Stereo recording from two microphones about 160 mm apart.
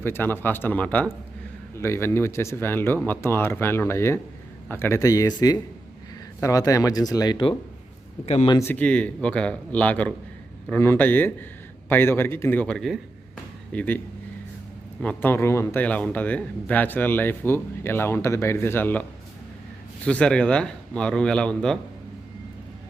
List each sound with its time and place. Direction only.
0.0 s speech: 15° left (ahead or behind); by 7.5 s 30° left (ahead or behind)
8.2 s speech: 40° left (ahead or behind)
8.4 s speech: 20° left (ahead or behind)
8.7 s speech: 10° left (ahead or behind)
15.0 s speech: 15° left (ahead or behind)
20.1 s a man's voice: 5° left (ahead or behind)